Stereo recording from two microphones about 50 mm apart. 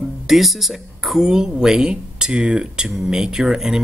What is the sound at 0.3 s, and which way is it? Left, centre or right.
Speech, centre.